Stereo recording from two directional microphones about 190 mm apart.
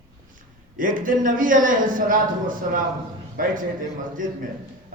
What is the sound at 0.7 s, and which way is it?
A man's voice, 45° right (ahead or behind).